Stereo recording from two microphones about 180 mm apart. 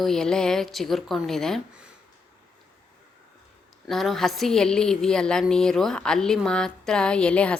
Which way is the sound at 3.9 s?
Centre (ahead or behind).